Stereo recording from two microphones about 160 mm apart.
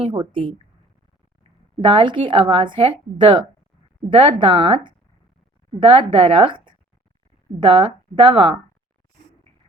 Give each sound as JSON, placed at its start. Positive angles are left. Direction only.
{"t": 0.0, "sound": "a woman's voice", "side_deg": -30}
{"t": 1.8, "sound": "a woman's voice", "side_deg": -30}